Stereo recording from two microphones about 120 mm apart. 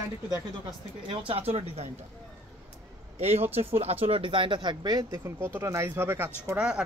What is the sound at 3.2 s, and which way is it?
Speech, 60° right (ahead or behind).